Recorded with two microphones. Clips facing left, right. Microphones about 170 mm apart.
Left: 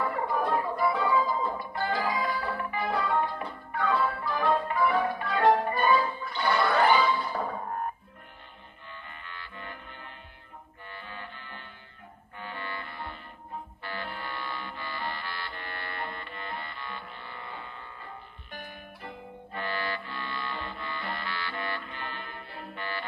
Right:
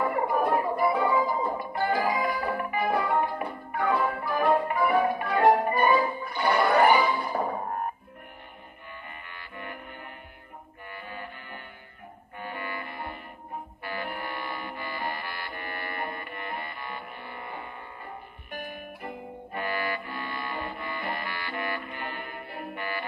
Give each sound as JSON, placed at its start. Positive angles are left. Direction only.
{"t": 0.0, "sound": "music", "side_deg": -20}
{"t": 7.3, "sound": "music", "side_deg": -25}
{"t": 9.0, "sound": "music", "side_deg": -15}
{"t": 19.0, "sound": "music", "side_deg": -15}